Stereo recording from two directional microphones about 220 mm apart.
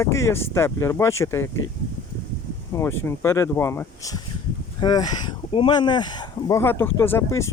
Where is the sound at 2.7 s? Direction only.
10° left (ahead or behind).